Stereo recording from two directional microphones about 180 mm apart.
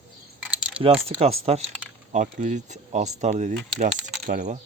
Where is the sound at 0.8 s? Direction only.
35° right (ahead or behind).